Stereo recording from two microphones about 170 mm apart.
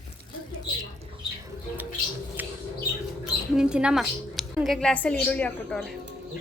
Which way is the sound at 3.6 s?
5° right (ahead or behind).